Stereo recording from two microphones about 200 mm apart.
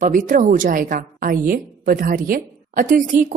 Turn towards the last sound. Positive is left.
turn(degrees=-40)  # may be behind; listen again after turning